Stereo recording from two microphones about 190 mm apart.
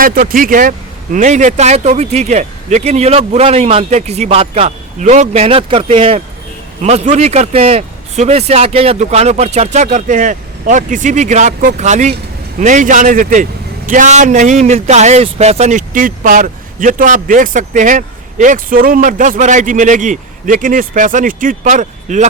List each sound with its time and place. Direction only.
0.0 s a man's voice: 50° right (ahead or behind)